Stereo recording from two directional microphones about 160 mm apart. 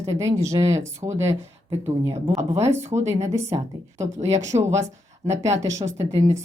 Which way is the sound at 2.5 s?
40° right (ahead or behind).